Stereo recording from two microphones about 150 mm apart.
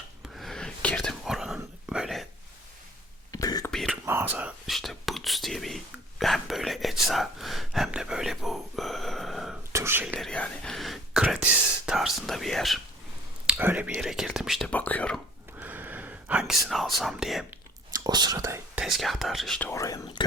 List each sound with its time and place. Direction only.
0.3 s whispering: centre (ahead or behind)
1.2 s a sound: centre (ahead or behind)
1.5 s whispering: 5° right (ahead or behind)
3.3 s a sound: 25° left (ahead or behind)
3.7 s a sound: centre (ahead or behind)
4.0 s whispering: 15° right (ahead or behind)
9.7 s whispering: 15° right (ahead or behind)
10.2 s whispering: 5° left (ahead or behind)
13.5 s whispering: 10° right (ahead or behind)
14.7 s whispering: 10° left (ahead or behind)
15.5 s whispering: 10° right (ahead or behind)
17.9 s whispering: 25° right (ahead or behind)
18.8 s whispering: centre (ahead or behind)
19.8 s whispering: 25° left (ahead or behind)